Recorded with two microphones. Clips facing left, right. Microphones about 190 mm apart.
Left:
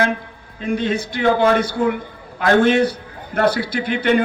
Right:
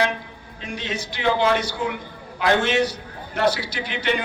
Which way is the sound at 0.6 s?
55° left (ahead or behind).